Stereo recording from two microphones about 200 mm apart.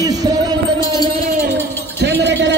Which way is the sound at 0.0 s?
20° right (ahead or behind).